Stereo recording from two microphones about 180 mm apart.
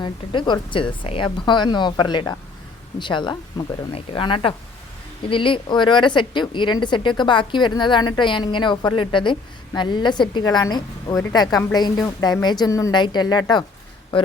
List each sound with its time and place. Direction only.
0.0 s a woman's voice: 25° left (ahead or behind)